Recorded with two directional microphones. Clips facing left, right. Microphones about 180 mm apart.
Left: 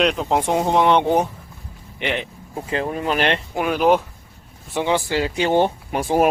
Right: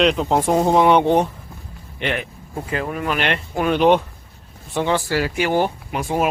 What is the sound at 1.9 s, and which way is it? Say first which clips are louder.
Speech: even; 15° left (ahead or behind).